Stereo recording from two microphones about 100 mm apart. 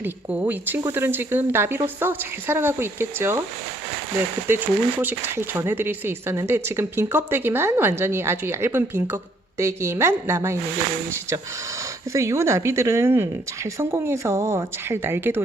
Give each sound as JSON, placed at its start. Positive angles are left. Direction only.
{"t": 0.0, "sound": "speech", "side_deg": -20}
{"t": 4.4, "sound": "speech", "side_deg": -20}
{"t": 12.1, "sound": "speech", "side_deg": -30}